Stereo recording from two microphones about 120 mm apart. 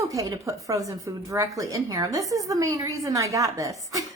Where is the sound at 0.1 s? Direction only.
30° right (ahead or behind).